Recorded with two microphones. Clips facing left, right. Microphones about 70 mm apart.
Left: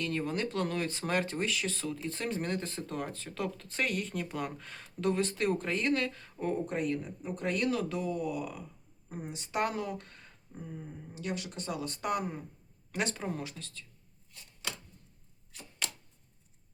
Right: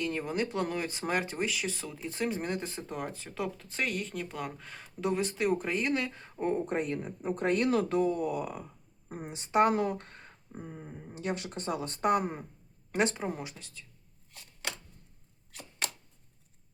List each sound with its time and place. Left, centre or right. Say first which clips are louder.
0.0 s speech: right 1 dB; centre; by 12.5 s right
12.9 s speech: right 4 dB; right